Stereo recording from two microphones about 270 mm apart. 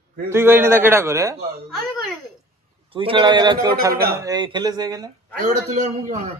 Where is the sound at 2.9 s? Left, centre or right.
Centre.